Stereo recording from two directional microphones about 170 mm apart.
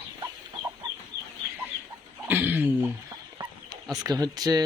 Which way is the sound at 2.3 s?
10° right (ahead or behind).